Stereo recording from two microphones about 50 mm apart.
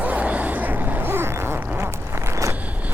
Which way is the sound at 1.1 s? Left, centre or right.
Right.